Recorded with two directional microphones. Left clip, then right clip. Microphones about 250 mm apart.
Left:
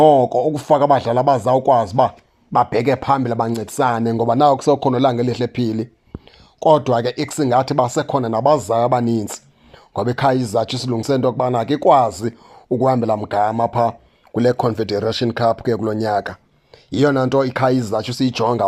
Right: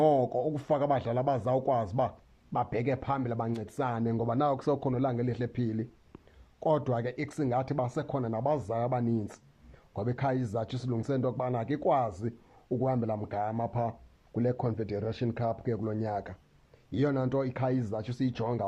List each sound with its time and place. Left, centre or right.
0.2 s a man's voice: left
0.6 s speech: centre